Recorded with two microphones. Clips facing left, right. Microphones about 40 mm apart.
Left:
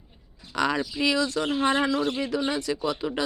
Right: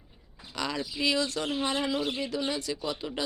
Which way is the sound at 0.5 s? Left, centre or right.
Left.